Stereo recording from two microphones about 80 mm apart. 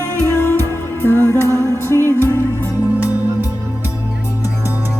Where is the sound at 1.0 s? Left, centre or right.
Left.